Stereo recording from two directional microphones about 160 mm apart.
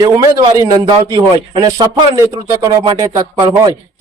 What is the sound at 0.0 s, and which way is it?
A man's voice, 25° right (ahead or behind).